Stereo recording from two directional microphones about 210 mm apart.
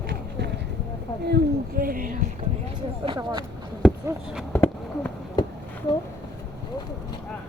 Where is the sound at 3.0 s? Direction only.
20° right (ahead or behind).